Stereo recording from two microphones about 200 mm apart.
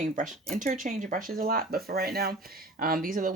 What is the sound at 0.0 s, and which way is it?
Speech, 40° right (ahead or behind).